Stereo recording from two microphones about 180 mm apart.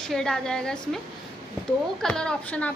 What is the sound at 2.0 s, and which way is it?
Speech, 5° left (ahead or behind).